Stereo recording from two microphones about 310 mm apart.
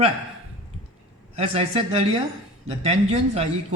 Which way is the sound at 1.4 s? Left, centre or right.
Centre.